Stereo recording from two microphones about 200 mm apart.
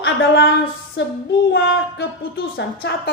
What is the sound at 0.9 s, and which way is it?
A woman's voice, 60° left (ahead or behind).